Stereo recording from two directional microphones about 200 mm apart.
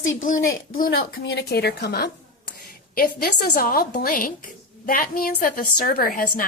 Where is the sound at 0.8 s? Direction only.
50° left (ahead or behind).